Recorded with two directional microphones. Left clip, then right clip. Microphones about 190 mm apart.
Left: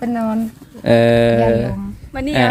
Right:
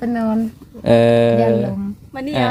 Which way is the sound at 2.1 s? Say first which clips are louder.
Left 4 dB; 40° left (ahead or behind).